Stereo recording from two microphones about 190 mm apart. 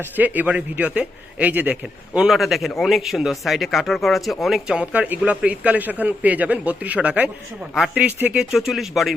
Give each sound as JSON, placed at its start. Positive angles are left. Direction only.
{"t": 0.0, "sound": "a man's voice", "side_deg": -10}